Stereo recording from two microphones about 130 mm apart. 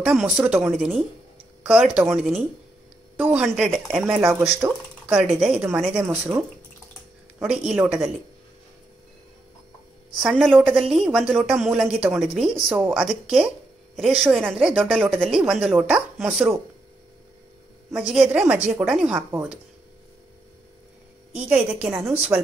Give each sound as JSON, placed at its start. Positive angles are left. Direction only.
{"t": 0.0, "sound": "a woman's voice", "side_deg": -5}
{"t": 4.2, "sound": "a woman's voice", "side_deg": -15}
{"t": 10.1, "sound": "a woman's voice", "side_deg": 0}
{"t": 14.5, "sound": "a woman's voice", "side_deg": 0}
{"t": 17.9, "sound": "a woman's voice", "side_deg": -5}
{"t": 21.3, "sound": "a woman's voice", "side_deg": -10}